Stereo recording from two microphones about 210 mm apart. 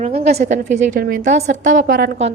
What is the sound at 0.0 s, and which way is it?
A woman's voice, 30° right (ahead or behind).